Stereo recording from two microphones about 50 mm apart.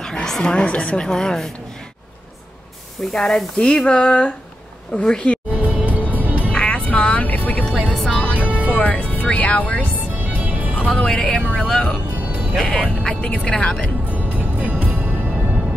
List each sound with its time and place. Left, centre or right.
0.0 s speech: centre
1.0 s a woman's voice: centre
3.1 s a woman's voice: centre
5.5 s music: right
6.5 s music: left
7.6 s music: centre
8.1 s music: left
10.1 s music: right
10.8 s music: left
11.1 s speech: centre
12.2 s music: right
12.5 s speech: centre
14.0 s music: right